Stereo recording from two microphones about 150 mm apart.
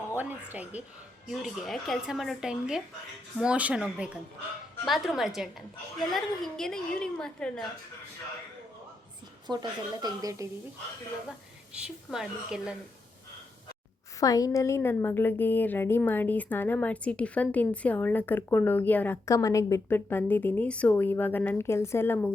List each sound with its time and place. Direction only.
0.2 s a woman's voice: 10° right (ahead or behind); by 7.7 s 5° left (ahead or behind)
9.5 s a woman's voice: 25° right (ahead or behind)
11.3 s a woman's voice: 5° right (ahead or behind)
14.2 s a woman's voice: 25° left (ahead or behind)